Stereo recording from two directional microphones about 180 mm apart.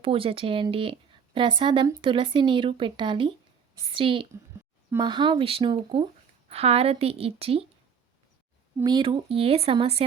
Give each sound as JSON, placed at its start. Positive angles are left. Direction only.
{"t": 0.0, "sound": "a woman's voice", "side_deg": -30}
{"t": 8.8, "sound": "speech", "side_deg": -25}